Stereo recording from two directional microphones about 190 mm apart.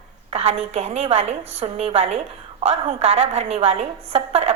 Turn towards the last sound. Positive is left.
turn(degrees=-30)  # may be behind; listen again after turning